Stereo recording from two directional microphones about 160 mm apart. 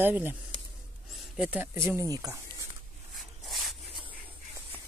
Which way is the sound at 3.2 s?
Centre (ahead or behind).